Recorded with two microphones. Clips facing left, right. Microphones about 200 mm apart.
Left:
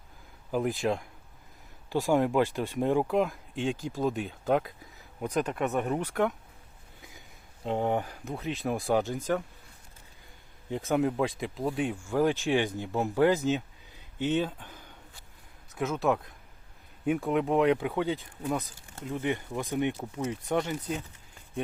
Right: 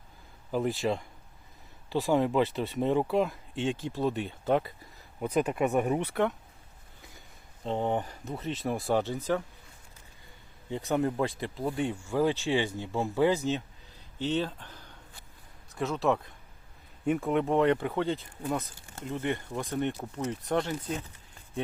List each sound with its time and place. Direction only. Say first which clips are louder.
0.5 s speech: left 1 dB; centre (ahead or behind)
2.0 s speech: left 1 dB; 5° left (ahead or behind); by 6.0 s 10° right (ahead or behind)
6.1 s speech: even; centre (ahead or behind)
7.6 s speech: left 1 dB; 5° left (ahead or behind)
10.7 s speech: left 1 dB; 5° left (ahead or behind)
12.2 s speech: left 1 dB; 15° left (ahead or behind)
14.3 s speech: left 2 dB; 10° left (ahead or behind)
15.7 s speech: even; centre (ahead or behind)